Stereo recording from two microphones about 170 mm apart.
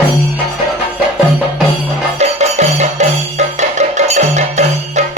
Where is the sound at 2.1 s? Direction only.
40° right (ahead or behind).